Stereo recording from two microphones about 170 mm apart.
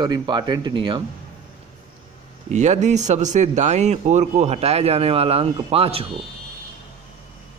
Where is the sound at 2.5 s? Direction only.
45° right (ahead or behind).